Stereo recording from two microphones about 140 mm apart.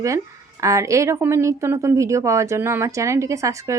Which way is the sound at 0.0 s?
20° right (ahead or behind).